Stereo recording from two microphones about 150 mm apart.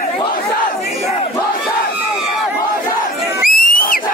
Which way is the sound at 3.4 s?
70° left (ahead or behind).